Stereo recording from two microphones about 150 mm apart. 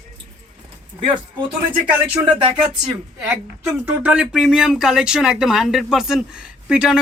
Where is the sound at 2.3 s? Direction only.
35° right (ahead or behind).